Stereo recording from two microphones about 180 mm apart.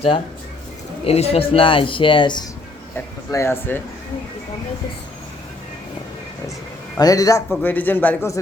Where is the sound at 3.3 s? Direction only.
15° left (ahead or behind).